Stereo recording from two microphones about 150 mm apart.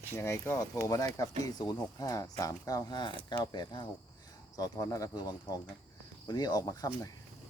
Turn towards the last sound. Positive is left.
turn(degrees=25)  # may be behind; listen again after turning